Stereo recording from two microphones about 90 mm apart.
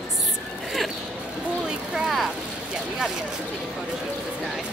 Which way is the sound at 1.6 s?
5° right (ahead or behind).